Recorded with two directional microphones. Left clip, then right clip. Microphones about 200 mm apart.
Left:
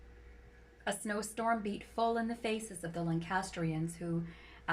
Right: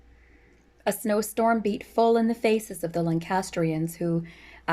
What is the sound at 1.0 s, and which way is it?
Speech, 60° right (ahead or behind).